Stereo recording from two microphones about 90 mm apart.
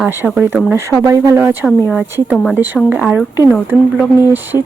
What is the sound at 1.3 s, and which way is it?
Speech, 25° right (ahead or behind).